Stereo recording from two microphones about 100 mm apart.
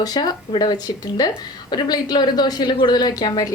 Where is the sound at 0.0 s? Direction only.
40° left (ahead or behind).